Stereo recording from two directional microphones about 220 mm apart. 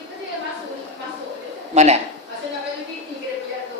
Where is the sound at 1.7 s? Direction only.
30° right (ahead or behind).